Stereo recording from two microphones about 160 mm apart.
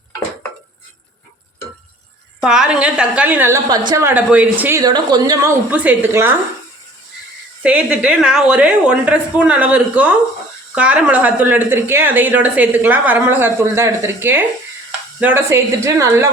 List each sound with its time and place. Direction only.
2.4 s speech: 5° right (ahead or behind)
4.8 s speech: 25° right (ahead or behind)
7.6 s speech: 10° right (ahead or behind)